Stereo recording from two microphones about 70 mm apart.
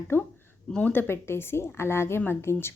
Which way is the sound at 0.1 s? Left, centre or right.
Left.